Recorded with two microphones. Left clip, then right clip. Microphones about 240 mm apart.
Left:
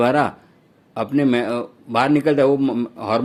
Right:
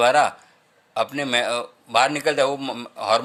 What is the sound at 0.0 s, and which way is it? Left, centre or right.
A man's voice, right.